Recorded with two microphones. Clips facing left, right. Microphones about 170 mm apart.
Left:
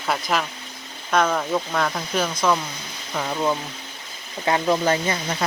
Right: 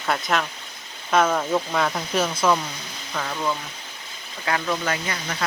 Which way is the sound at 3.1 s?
20° left (ahead or behind).